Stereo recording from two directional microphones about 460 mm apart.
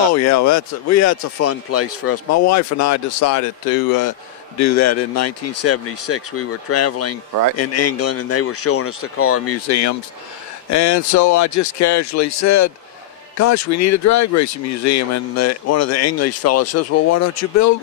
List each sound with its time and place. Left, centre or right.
0.1 s speech: left
4.6 s speech: left